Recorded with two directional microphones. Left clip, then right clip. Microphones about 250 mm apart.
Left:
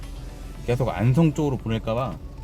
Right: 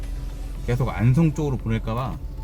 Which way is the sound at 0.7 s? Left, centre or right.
Centre.